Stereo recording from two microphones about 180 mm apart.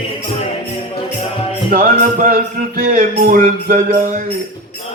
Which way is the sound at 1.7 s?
50° right (ahead or behind).